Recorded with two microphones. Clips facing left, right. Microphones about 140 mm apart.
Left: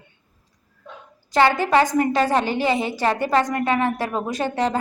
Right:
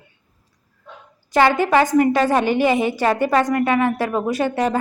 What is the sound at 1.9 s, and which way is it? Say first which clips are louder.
Speech: right 4 dB; 30° left (ahead or behind).